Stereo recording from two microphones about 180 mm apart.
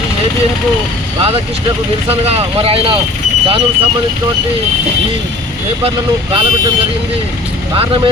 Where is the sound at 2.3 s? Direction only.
35° right (ahead or behind).